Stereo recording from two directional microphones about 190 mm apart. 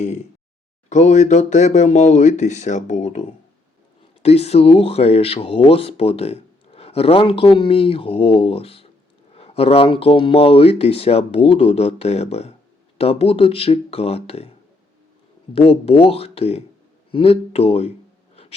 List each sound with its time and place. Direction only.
0.0 s a sound: 40° left (ahead or behind)
0.9 s speech: 40° left (ahead or behind)
15.5 s speech: 30° left (ahead or behind)